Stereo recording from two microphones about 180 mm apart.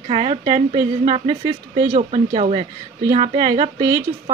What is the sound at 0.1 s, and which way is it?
Speech, 30° right (ahead or behind).